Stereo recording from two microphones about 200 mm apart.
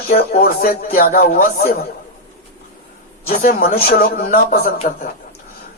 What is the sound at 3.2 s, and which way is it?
A woman's voice, 50° left (ahead or behind).